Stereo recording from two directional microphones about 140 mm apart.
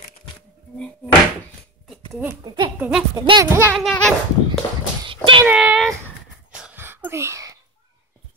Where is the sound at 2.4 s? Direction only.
35° right (ahead or behind).